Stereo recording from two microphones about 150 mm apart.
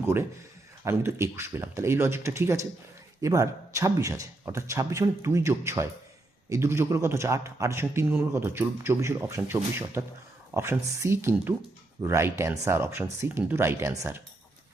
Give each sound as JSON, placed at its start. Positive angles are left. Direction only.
{"t": 0.0, "sound": "a man's voice", "side_deg": -15}